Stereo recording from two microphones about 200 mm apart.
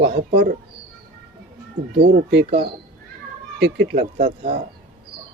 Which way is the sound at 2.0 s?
60° right (ahead or behind).